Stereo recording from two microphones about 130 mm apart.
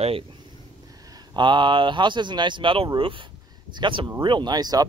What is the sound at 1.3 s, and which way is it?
Speech, 35° right (ahead or behind).